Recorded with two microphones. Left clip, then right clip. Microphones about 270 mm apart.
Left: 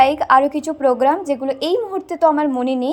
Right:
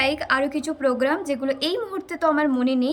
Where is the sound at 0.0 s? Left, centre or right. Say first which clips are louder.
Left 9 dB; centre.